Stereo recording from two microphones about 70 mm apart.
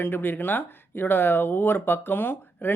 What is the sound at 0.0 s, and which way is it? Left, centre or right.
Speech, left.